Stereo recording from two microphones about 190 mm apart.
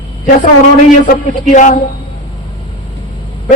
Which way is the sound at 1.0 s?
45° left (ahead or behind).